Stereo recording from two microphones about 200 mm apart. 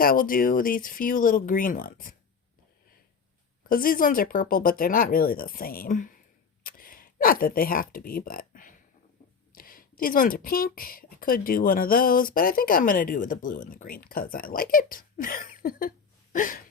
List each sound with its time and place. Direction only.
0.0 s speech: 45° left (ahead or behind)
3.7 s speech: 45° left (ahead or behind)
16.3 s a sound: 40° left (ahead or behind)